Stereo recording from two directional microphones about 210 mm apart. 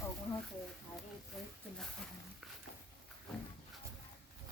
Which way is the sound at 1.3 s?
Centre (ahead or behind).